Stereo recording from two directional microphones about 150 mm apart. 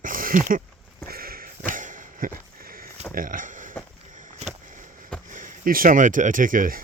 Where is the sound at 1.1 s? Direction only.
80° right.